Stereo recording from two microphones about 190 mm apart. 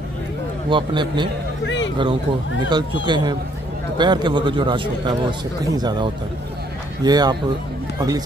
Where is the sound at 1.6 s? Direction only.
70° left (ahead or behind).